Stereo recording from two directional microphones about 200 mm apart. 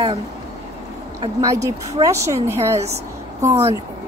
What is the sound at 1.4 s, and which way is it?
A woman's voice, 15° right (ahead or behind).